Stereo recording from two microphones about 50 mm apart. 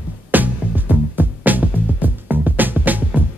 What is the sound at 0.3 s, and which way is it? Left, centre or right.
Music, right.